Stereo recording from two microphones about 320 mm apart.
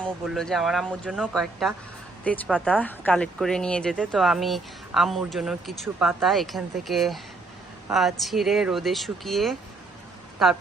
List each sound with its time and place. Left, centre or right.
0.0 s speech: centre